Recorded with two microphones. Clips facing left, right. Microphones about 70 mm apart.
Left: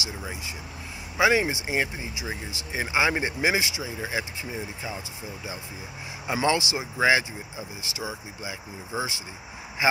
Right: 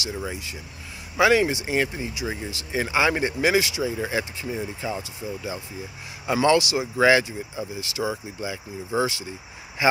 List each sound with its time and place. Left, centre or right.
1.1 s speech: centre
6.2 s speech: centre